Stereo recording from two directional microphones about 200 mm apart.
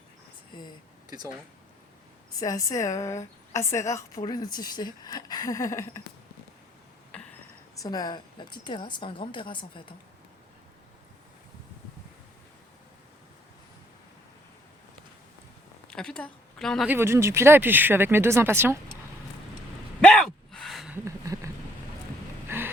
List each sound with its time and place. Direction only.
2.4 s a woman's voice: 15° left (ahead or behind)
7.1 s a sound: 5° left (ahead or behind)
7.8 s a woman's voice: 20° left (ahead or behind)
15.9 s speech: 5° left (ahead or behind)
16.9 s speech: 10° right (ahead or behind)
20.0 s gasp: 5° left (ahead or behind)
21.0 s a sound: 15° right (ahead or behind)
22.4 s vehicle: 10° right (ahead or behind)